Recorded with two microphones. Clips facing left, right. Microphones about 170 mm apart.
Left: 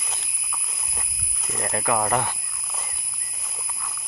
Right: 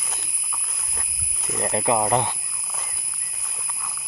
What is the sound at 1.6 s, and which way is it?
Speech, 25° right (ahead or behind).